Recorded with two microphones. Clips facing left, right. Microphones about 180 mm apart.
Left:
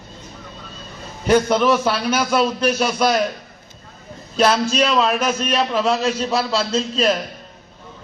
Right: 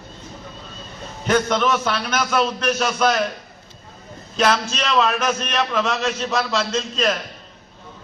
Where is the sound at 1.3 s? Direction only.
10° left (ahead or behind).